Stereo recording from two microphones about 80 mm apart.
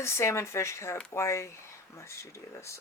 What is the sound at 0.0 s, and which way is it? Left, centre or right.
Speech, left.